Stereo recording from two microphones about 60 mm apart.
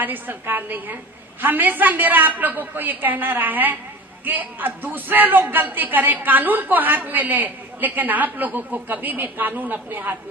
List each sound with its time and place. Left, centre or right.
0.0 s a woman's voice: right